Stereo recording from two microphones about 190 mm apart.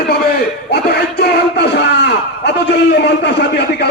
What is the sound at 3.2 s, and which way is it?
Speech, 60° left (ahead or behind).